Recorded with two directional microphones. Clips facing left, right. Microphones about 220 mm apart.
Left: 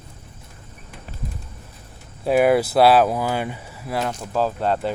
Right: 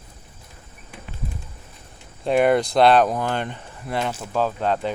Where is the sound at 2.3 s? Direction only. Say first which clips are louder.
Left 1 dB; 5° left (ahead or behind).